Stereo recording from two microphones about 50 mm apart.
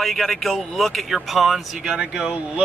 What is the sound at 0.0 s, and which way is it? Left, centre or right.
Speech, centre.